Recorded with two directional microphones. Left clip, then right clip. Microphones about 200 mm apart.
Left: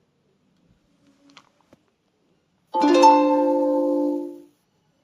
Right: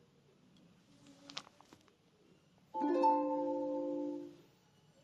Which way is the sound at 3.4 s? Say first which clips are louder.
Left 18 dB; 80° left.